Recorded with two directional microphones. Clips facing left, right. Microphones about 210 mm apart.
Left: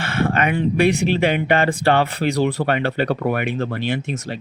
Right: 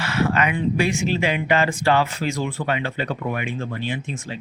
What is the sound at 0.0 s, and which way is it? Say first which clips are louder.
Speech: left 1 dB; 55° left (ahead or behind).